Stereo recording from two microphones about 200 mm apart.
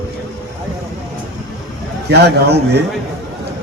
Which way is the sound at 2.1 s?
55° right (ahead or behind).